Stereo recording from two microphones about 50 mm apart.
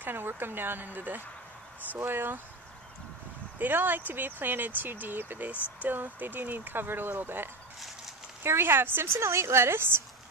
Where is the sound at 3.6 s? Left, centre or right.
Right.